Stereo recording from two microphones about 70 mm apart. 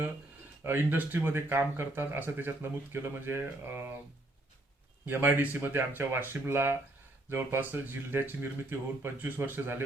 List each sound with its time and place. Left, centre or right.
0.6 s speech: right
5.0 s speech: right